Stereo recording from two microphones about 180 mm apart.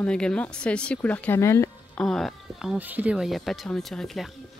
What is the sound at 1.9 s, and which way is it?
Speech, centre (ahead or behind).